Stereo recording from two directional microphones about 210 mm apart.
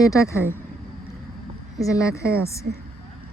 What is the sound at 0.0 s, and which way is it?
Speech, 15° left (ahead or behind).